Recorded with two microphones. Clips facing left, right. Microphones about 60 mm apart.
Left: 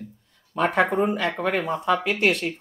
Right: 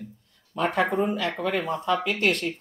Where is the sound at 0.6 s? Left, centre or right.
Left.